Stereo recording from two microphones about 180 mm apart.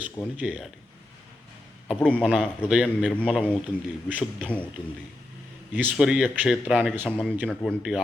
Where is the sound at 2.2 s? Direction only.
Centre (ahead or behind).